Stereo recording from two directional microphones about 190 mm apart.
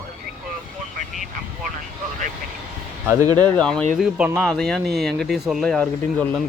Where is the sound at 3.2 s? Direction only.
20° right (ahead or behind).